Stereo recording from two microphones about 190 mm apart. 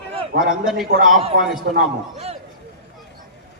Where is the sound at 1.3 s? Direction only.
55° right (ahead or behind).